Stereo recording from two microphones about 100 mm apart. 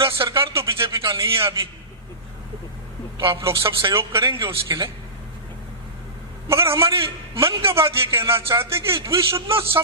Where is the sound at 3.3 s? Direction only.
25° right (ahead or behind).